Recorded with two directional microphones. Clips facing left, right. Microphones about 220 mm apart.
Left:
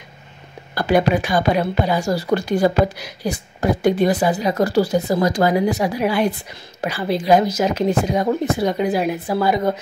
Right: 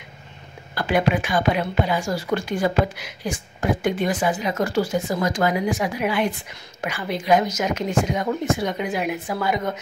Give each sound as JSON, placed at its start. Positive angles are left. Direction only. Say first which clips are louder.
{"t": 0.7, "sound": "a woman's voice", "louder": "left 4 dB", "side_deg": 40}